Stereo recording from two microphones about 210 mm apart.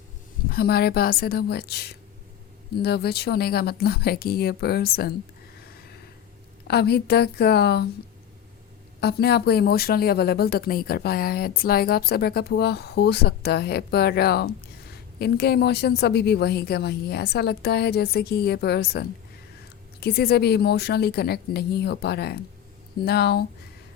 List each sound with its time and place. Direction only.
0.4 s speech: 45° left (ahead or behind)
6.7 s speech: 50° left (ahead or behind)
9.0 s speech: 50° left (ahead or behind)